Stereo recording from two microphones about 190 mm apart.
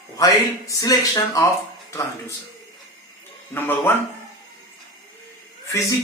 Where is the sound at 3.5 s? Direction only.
10° left (ahead or behind).